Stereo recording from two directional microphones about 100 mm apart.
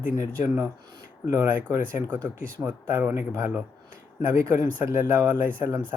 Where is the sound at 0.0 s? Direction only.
25° right (ahead or behind).